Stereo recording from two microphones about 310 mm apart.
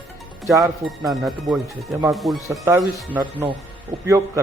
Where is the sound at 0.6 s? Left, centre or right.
Centre.